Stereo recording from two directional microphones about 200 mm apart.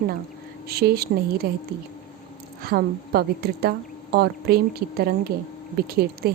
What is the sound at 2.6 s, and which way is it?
A woman's voice, 50° right (ahead or behind).